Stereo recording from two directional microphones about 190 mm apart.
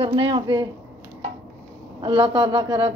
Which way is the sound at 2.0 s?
25° right (ahead or behind).